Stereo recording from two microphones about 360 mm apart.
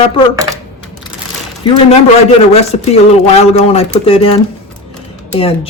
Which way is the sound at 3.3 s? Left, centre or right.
Centre.